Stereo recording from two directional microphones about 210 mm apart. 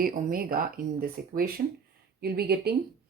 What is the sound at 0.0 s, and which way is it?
Speech, 40° right (ahead or behind).